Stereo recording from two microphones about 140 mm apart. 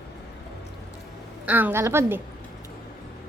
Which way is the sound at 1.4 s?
10° right (ahead or behind).